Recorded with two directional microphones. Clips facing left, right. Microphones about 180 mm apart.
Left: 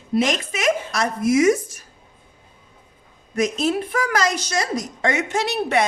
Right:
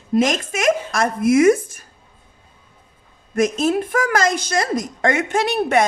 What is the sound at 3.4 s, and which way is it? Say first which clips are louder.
A woman's voice: right 3 dB; 50° right (ahead or behind).